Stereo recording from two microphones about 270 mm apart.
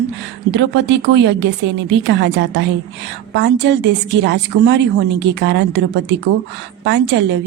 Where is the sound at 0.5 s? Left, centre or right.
Right.